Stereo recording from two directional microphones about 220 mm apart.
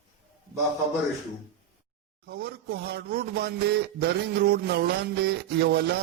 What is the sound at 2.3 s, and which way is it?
A man's voice, 45° right (ahead or behind).